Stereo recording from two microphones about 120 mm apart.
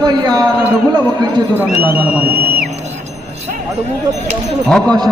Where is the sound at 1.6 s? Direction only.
15° right (ahead or behind).